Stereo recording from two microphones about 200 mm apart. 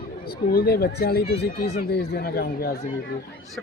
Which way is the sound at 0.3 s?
50° left (ahead or behind).